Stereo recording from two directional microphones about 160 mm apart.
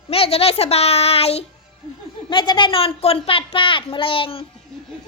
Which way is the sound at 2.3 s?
30° left (ahead or behind).